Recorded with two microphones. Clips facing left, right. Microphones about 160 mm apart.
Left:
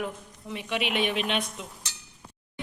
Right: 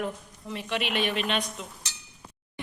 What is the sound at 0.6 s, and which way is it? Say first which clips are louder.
Speech: left 1 dB; 10° left (ahead or behind).